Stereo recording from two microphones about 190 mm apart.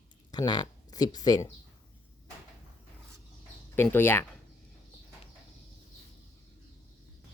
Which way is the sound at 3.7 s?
10° left (ahead or behind).